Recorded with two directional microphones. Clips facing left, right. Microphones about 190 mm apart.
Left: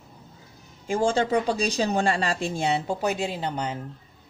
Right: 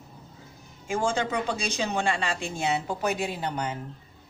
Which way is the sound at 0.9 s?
35° left (ahead or behind).